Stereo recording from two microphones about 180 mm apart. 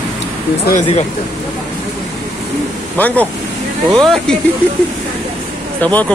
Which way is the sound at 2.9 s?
10° left (ahead or behind).